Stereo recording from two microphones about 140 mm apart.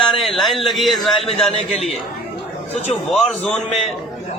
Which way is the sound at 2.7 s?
50° left (ahead or behind).